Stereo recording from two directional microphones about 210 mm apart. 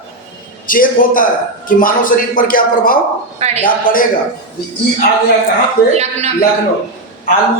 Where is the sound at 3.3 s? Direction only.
30° right (ahead or behind).